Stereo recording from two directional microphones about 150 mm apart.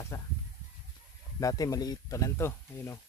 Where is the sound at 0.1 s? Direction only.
20° left (ahead or behind).